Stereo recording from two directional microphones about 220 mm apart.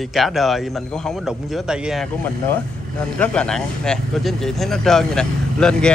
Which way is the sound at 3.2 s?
5° left (ahead or behind).